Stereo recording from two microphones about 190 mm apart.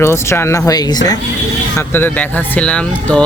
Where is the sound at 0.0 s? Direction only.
15° left (ahead or behind).